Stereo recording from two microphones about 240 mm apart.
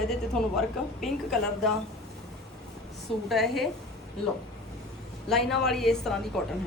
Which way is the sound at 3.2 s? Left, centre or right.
Centre.